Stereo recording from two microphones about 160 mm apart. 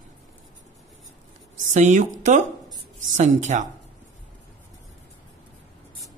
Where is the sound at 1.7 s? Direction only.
50° right (ahead or behind).